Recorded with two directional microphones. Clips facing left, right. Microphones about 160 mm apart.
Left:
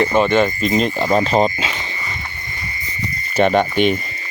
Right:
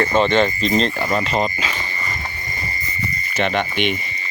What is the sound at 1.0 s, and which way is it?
Speech, 35° left (ahead or behind).